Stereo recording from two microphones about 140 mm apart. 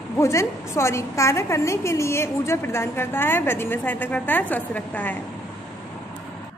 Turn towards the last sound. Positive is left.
turn(degrees=10)  # may be behind; listen again after turning